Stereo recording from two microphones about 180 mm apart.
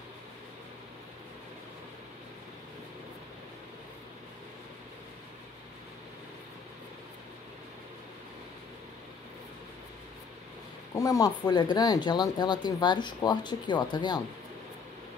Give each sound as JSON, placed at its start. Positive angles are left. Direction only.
{"t": 11.0, "sound": "speech", "side_deg": 20}